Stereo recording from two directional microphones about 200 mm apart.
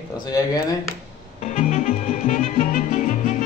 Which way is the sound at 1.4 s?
35° left (ahead or behind).